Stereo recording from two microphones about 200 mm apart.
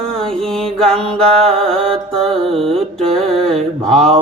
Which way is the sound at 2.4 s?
30° right (ahead or behind).